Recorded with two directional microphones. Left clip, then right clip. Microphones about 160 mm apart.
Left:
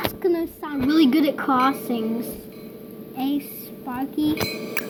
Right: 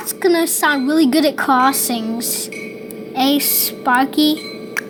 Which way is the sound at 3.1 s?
15° right (ahead or behind).